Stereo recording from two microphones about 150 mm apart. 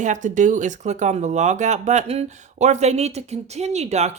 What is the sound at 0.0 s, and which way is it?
Speech, 55° right (ahead or behind).